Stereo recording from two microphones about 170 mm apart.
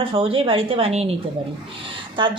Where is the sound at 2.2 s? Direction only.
30° right (ahead or behind).